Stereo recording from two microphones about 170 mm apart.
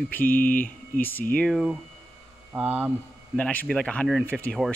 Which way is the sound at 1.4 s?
Centre (ahead or behind).